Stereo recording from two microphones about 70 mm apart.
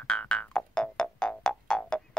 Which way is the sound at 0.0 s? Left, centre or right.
Centre.